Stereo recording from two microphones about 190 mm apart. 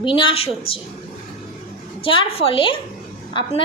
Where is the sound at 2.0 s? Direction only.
25° left (ahead or behind).